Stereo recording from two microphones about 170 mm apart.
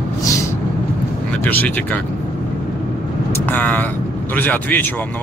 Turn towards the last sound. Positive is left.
turn(degrees=10)  # may be behind; listen again after turning